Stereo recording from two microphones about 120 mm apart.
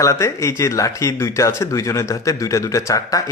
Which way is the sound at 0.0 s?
25° left (ahead or behind).